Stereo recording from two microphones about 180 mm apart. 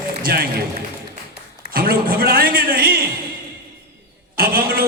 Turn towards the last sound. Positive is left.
turn(degrees=-55)  # may be behind; listen again after turning